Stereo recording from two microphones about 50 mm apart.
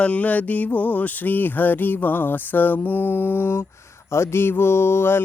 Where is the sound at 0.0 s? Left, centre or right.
Left.